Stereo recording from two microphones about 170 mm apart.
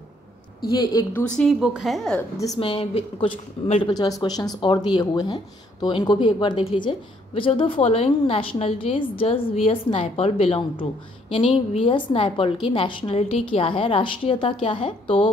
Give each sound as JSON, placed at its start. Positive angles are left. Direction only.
{"t": 0.7, "sound": "a woman's voice", "side_deg": 20}
{"t": 1.1, "sound": "a woman's voice", "side_deg": 5}
{"t": 2.3, "sound": "a woman's voice", "side_deg": 20}
{"t": 2.6, "sound": "speech", "side_deg": 35}